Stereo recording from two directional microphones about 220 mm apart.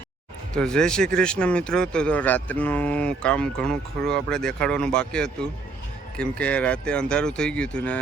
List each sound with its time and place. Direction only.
0.5 s speech: 5° left (ahead or behind)